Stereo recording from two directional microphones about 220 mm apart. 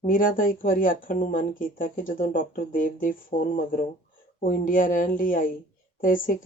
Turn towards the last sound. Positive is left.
turn(degrees=40)  # may be behind; listen again after turning